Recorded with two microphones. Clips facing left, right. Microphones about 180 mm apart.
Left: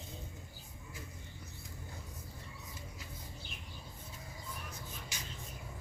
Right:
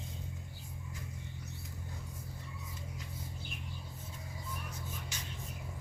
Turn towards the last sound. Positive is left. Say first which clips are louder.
# right 1 dB
turn(degrees=10)  # may be behind; listen again after turning